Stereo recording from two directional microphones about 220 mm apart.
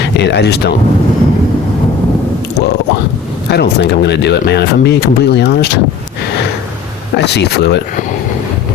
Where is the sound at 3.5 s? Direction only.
50° left (ahead or behind).